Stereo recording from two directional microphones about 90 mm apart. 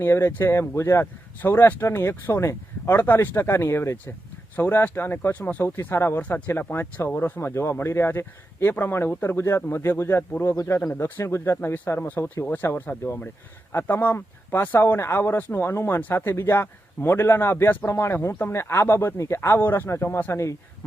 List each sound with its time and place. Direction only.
0.0 s speech: 25° left (ahead or behind)